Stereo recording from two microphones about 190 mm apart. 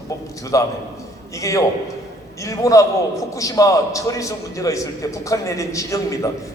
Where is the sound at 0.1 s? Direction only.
15° left (ahead or behind).